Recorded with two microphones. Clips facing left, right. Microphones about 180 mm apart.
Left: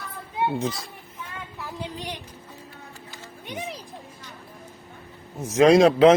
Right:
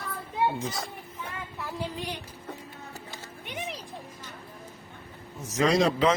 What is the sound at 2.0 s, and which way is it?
Speech, 20° left (ahead or behind).